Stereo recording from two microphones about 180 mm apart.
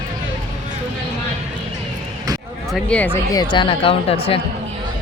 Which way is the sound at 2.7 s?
5° left (ahead or behind).